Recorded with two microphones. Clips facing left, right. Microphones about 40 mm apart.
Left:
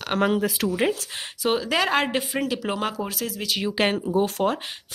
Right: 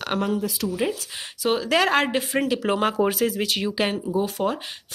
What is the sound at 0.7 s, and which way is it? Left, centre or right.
Speech, left.